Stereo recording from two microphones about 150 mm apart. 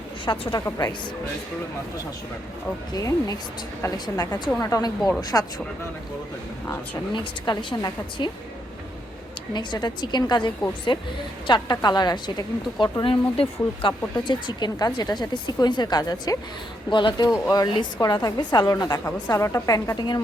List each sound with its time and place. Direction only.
0.3 s a woman's voice: 30° left (ahead or behind)
2.9 s a woman's voice: 25° left (ahead or behind)
7.1 s a woman's voice: 30° left (ahead or behind)
9.5 s a woman's voice: 30° left (ahead or behind)